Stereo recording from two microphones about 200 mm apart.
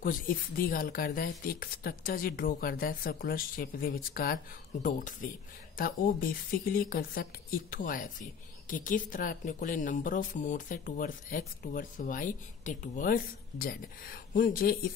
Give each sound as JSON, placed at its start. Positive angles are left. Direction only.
{"t": 0.0, "sound": "a woman's voice", "side_deg": 45}